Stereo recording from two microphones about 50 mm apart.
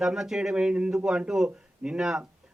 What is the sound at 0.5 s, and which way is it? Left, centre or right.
A man's voice, centre.